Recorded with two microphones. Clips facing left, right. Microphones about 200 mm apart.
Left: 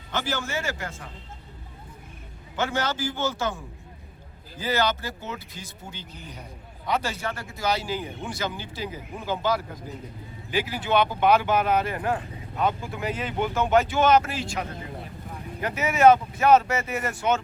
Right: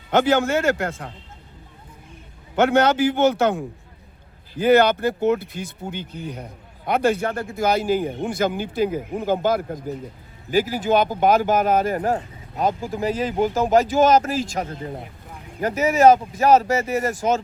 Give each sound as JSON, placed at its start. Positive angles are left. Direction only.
{"t": 0.8, "sound": "speech", "side_deg": -85}
{"t": 2.6, "sound": "a man's voice", "side_deg": -70}